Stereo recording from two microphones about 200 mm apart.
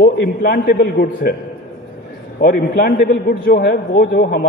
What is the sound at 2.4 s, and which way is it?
A man's voice, 50° left (ahead or behind).